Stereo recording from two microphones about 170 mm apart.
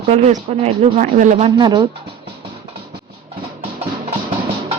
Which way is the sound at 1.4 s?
30° right (ahead or behind).